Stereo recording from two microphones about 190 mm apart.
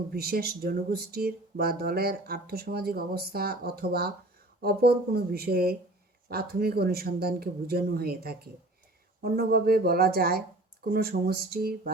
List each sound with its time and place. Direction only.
0.1 s speech: 50° right (ahead or behind)